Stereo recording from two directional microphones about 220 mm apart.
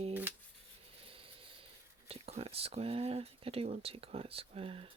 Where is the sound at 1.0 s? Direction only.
25° right (ahead or behind).